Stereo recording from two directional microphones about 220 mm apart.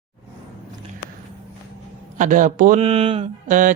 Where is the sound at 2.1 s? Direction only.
35° right (ahead or behind).